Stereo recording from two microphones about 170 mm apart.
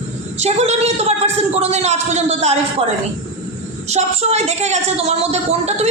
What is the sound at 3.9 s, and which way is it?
A woman's voice, 40° right (ahead or behind).